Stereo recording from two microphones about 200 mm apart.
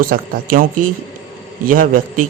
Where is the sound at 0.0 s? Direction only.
45° right (ahead or behind).